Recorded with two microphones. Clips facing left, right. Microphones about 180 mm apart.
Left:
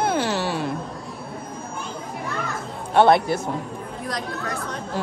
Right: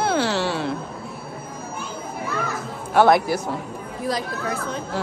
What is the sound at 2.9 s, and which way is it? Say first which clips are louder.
Speech: even; 25° left (ahead or behind).